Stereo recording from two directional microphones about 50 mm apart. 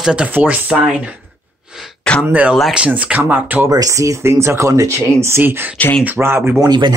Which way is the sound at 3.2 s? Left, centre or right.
Right.